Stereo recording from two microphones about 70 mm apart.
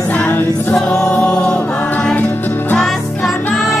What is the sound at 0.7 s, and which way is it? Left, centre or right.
Choir, centre.